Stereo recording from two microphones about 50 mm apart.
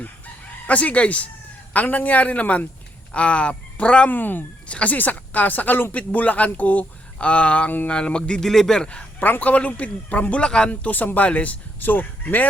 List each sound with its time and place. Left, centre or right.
0.7 s speech: left
4.1 s speech: left
4.7 s speech: left
9.2 s speech: left